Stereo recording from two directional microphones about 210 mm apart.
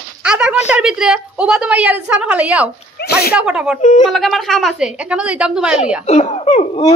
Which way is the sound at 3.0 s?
50° left (ahead or behind).